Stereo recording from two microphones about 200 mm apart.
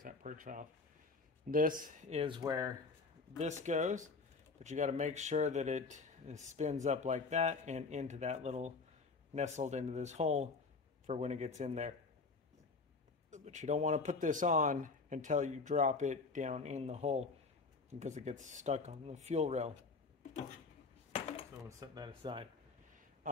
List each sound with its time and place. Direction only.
0.0 s speech: 40° right (ahead or behind); by 2.7 s 20° right (ahead or behind)
3.3 s speech: 35° right (ahead or behind)
13.3 s speech: 40° right (ahead or behind)
21.1 s dishes: 30° left (ahead or behind)
21.6 s speech: 20° right (ahead or behind)